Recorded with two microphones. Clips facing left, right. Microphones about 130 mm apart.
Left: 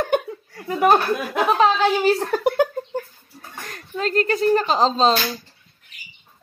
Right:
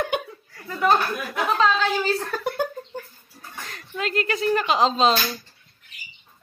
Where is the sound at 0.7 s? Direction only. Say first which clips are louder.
Left 4 dB; 55° left (ahead or behind).